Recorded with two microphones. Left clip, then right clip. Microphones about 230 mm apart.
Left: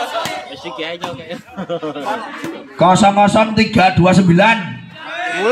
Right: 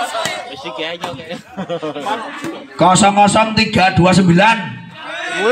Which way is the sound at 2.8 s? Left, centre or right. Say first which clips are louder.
Even; right.